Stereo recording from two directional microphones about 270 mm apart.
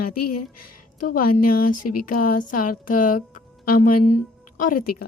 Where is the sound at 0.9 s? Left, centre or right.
Left.